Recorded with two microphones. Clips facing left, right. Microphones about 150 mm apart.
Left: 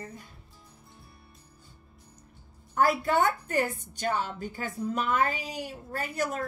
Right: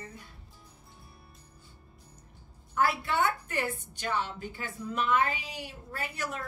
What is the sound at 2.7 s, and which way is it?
A woman's voice, 40° left (ahead or behind).